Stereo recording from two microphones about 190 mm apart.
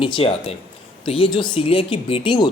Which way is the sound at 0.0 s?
30° left (ahead or behind).